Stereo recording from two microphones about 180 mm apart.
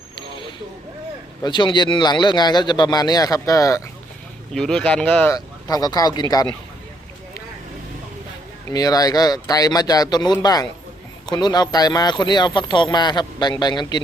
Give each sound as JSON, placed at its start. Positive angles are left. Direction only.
{"t": 1.4, "sound": "speech", "side_deg": 25}
{"t": 4.5, "sound": "speech", "side_deg": 5}
{"t": 5.3, "sound": "speech", "side_deg": 20}
{"t": 8.7, "sound": "speech", "side_deg": 20}